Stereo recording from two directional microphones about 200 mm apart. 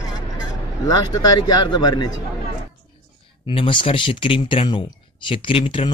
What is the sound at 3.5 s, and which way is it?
Speech, 25° left (ahead or behind).